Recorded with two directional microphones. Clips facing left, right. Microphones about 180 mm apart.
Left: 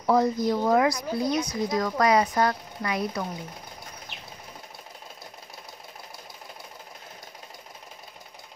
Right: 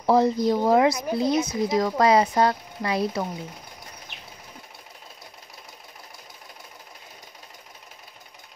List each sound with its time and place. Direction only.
0.0 s speech: 25° right (ahead or behind)